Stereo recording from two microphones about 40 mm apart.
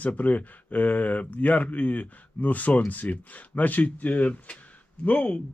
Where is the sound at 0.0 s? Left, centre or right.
Left.